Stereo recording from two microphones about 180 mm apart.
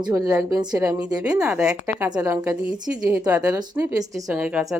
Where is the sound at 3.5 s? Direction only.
20° right (ahead or behind).